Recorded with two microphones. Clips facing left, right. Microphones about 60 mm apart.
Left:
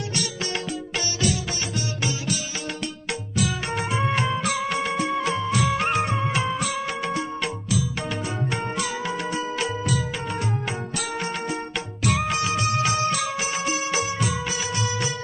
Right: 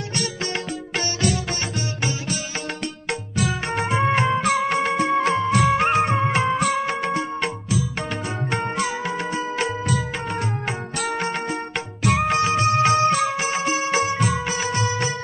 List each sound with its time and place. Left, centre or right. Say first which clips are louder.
0.2 s music: right 4 dB; right
3.1 s music: right 2 dB; right